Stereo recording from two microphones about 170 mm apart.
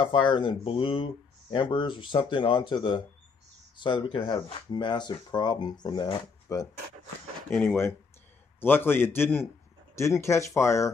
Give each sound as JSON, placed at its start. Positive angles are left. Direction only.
{"t": 0.0, "sound": "speech", "side_deg": 30}
{"t": 7.4, "sound": "speech", "side_deg": 5}